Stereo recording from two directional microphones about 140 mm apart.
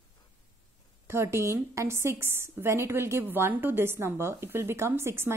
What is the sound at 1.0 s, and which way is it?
A woman's voice, 20° right (ahead or behind).